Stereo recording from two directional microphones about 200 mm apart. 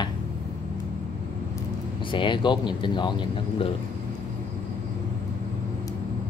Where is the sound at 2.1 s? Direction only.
25° left (ahead or behind).